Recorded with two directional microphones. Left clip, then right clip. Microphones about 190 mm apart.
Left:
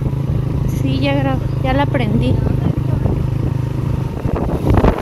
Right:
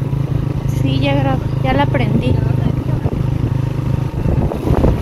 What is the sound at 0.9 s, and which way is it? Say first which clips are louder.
Speech: right 1 dB; 10° left (ahead or behind).